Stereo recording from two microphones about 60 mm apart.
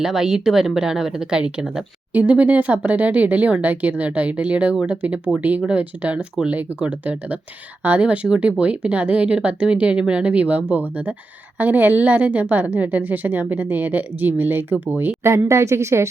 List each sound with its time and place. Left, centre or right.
0.0 s a woman's voice: centre; by 15.1 s right
15.2 s a woman's voice: right